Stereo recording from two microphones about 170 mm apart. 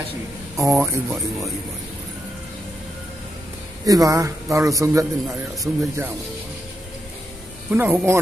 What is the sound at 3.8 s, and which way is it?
A man's voice, 20° right (ahead or behind).